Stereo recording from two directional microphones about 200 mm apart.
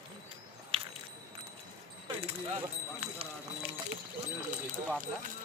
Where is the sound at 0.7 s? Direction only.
25° right (ahead or behind).